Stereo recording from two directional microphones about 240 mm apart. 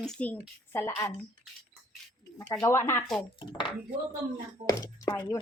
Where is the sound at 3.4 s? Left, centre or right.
Left.